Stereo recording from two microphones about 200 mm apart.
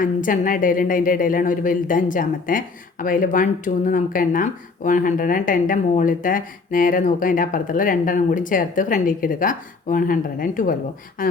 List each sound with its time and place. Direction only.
0.0 s a woman's voice: 40° left (ahead or behind)